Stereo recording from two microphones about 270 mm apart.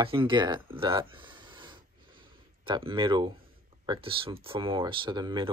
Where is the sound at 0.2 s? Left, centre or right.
Centre.